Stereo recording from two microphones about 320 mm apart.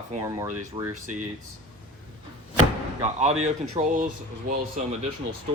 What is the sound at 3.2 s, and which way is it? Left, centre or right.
Speech, right.